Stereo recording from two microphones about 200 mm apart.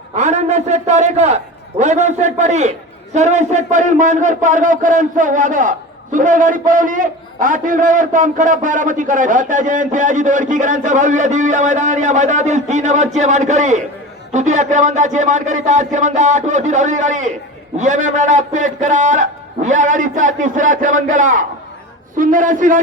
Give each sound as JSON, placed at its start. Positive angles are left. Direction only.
{"t": 0.2, "sound": "a man's voice", "side_deg": -35}